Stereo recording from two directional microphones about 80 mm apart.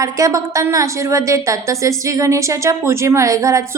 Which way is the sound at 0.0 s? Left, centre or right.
Right.